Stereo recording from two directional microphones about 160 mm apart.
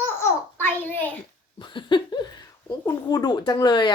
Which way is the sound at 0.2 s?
15° left (ahead or behind).